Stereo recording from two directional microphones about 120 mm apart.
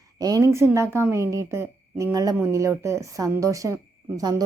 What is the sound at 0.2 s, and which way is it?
A woman's voice, 30° right (ahead or behind).